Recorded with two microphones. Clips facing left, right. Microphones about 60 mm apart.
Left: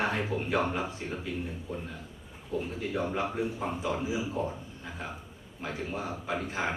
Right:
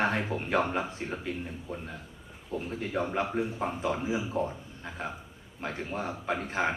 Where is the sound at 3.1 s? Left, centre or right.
Right.